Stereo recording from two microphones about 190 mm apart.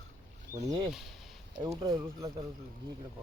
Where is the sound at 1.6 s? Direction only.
20° right (ahead or behind).